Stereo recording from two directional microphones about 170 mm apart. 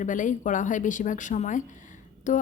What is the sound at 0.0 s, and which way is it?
A woman's voice, 50° left (ahead or behind).